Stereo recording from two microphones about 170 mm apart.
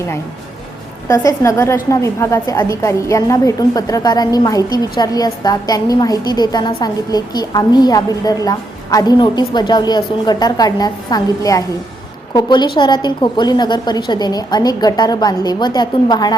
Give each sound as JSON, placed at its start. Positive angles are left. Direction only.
{"t": 1.0, "sound": "a woman's voice", "side_deg": 20}